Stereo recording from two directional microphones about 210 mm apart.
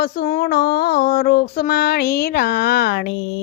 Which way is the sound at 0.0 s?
45° left (ahead or behind).